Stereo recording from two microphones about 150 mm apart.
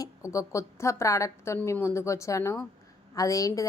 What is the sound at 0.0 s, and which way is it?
A woman's voice, 20° left (ahead or behind).